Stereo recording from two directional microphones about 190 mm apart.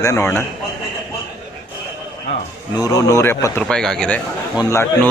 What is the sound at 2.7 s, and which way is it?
A man's voice, 20° left (ahead or behind).